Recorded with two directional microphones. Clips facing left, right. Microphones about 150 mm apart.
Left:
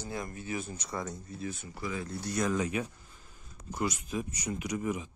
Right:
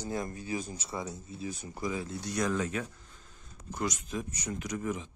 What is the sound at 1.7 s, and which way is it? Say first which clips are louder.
Speech: right 3 dB; 15° right (ahead or behind).